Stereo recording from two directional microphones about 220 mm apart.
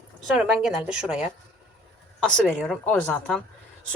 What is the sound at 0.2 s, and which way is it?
Speech, centre (ahead or behind).